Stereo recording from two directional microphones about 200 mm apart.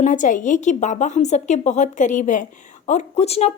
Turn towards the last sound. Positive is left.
turn(degrees=30)  # may be behind; listen again after turning